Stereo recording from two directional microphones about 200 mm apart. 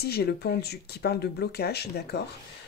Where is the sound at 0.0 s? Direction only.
50° left (ahead or behind).